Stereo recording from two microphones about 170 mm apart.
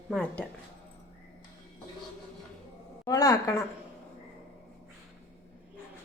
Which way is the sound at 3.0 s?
20° left (ahead or behind).